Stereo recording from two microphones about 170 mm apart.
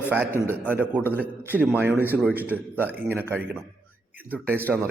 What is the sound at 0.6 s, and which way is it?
A man's voice, 10° right (ahead or behind).